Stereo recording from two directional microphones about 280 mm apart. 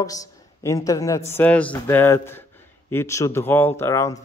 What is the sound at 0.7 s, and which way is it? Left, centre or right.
A man's voice, centre.